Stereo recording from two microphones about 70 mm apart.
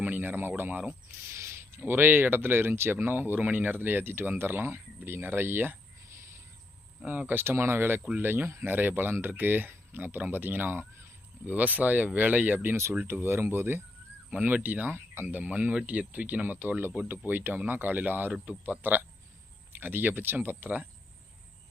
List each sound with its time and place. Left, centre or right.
0.0 s speech: right
1.3 s speech: right
7.0 s speech: right
12.7 s speech: right